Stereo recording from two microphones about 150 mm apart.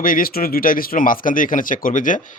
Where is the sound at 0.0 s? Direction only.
70° left (ahead or behind).